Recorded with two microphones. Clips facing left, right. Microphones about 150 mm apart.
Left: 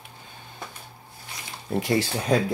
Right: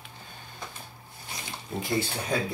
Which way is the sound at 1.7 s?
80° left.